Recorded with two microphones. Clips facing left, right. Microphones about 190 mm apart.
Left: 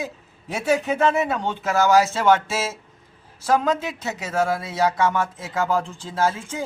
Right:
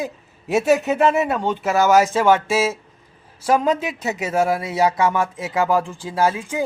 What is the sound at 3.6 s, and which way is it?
Speech, 15° right (ahead or behind).